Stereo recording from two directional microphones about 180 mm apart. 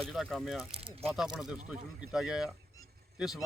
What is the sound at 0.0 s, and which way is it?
Speech, centre (ahead or behind).